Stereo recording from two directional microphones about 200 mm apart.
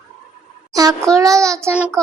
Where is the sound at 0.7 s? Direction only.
20° right (ahead or behind).